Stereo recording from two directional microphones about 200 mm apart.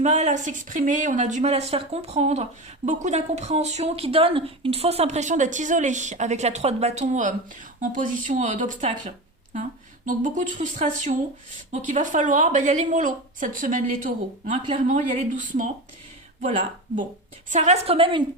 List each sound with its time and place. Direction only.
0.0 s a woman's voice: 35° right (ahead or behind)